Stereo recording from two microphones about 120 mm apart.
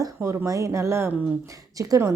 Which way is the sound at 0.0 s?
20° right (ahead or behind).